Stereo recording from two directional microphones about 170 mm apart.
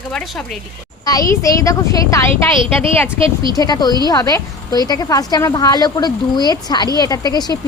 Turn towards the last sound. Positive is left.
turn(degrees=25)  # may be behind; listen again after turning